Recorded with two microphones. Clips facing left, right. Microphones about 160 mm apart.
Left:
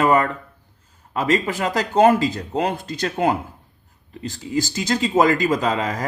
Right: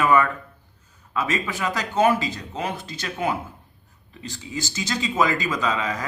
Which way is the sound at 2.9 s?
50° left (ahead or behind).